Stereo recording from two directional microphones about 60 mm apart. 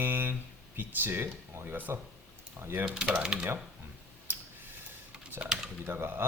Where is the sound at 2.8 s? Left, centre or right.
Centre.